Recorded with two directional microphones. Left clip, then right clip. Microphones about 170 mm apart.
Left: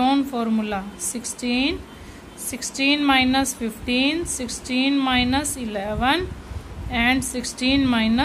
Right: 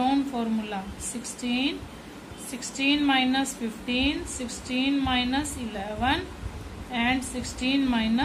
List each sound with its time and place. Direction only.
0.0 s a woman's voice: 45° left (ahead or behind)